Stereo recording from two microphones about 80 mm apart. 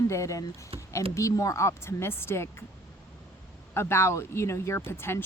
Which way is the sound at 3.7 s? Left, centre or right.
Left.